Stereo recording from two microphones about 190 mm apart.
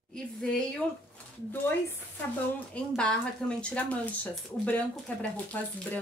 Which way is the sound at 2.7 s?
5° left (ahead or behind).